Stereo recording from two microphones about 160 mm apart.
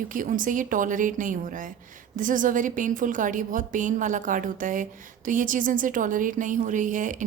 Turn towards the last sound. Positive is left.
turn(degrees=-55)  # may be behind; listen again after turning